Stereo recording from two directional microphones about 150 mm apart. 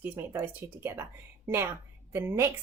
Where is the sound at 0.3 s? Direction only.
15° right (ahead or behind).